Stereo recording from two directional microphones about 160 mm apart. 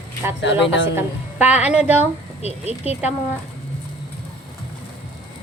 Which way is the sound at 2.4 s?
40° left (ahead or behind).